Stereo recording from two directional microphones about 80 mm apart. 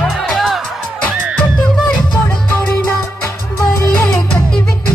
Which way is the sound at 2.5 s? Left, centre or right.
Left.